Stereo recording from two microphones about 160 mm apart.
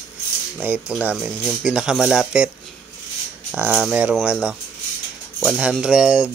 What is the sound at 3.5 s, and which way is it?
Speech, 5° right (ahead or behind).